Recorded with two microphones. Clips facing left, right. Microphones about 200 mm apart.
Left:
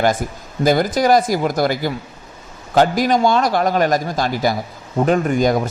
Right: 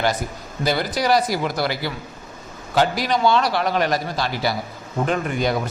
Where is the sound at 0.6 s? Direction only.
45° left (ahead or behind).